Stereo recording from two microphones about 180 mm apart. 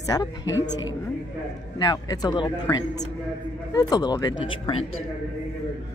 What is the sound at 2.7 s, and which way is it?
Speech, 10° left (ahead or behind).